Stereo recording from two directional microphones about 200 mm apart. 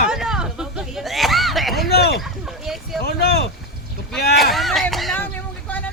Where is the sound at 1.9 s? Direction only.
55° left (ahead or behind).